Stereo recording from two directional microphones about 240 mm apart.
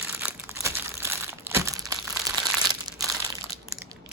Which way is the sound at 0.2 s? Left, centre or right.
Centre.